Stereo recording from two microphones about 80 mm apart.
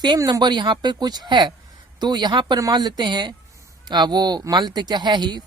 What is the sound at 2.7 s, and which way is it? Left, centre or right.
A woman's voice, right.